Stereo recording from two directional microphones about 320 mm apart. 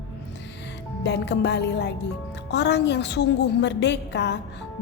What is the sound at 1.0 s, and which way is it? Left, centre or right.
A woman's voice, left.